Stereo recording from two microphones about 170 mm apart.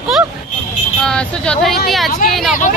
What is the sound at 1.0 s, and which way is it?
Speech, 5° left (ahead or behind).